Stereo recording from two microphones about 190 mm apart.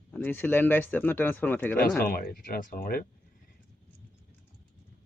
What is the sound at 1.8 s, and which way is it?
Speech, 50° left (ahead or behind).